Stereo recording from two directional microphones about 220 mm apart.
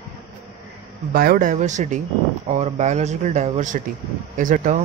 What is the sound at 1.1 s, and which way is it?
Speech, 40° right (ahead or behind).